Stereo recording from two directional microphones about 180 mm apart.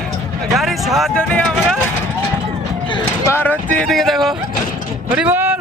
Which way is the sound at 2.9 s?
25° left (ahead or behind).